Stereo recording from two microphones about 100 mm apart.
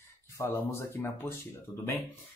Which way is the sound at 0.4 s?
25° left (ahead or behind).